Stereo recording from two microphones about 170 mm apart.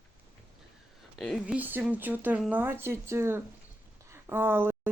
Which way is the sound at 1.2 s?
5° right (ahead or behind).